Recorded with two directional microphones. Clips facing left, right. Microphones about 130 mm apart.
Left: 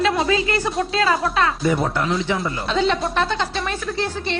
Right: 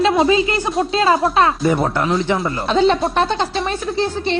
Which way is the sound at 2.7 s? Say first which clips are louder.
Right 5 dB; 25° right (ahead or behind).